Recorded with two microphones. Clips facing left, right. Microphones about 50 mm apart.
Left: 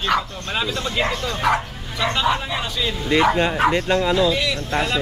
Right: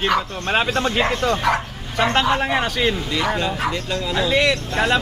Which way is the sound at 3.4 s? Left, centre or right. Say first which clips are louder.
Left 4 dB; left.